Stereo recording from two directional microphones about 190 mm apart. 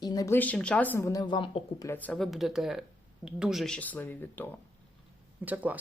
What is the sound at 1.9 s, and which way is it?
Speech, 10° left (ahead or behind).